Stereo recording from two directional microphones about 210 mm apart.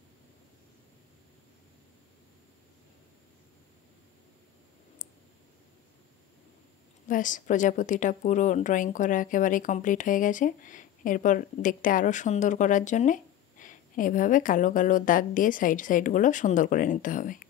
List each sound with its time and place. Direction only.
7.1 s a woman's voice: 40° left (ahead or behind)